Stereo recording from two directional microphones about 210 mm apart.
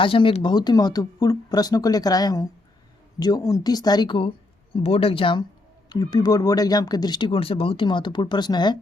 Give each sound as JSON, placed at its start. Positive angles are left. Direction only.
{"t": 0.0, "sound": "speech", "side_deg": 25}